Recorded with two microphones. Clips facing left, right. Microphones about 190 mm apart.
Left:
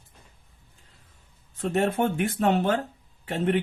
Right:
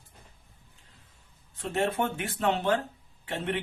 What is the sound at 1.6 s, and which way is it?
Speech, 45° left (ahead or behind).